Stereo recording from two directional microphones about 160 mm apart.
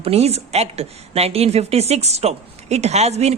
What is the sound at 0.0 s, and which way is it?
A woman's voice, 40° right (ahead or behind).